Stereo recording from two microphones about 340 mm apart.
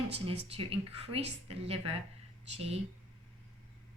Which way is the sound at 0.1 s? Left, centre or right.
Centre.